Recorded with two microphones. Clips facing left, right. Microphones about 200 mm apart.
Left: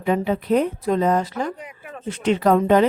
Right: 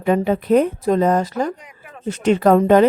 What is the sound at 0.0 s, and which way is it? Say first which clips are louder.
Speech: right 3 dB; 50° right (ahead or behind).